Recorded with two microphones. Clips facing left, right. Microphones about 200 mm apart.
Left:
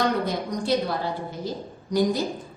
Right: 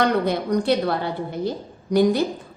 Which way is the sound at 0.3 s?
65° right (ahead or behind).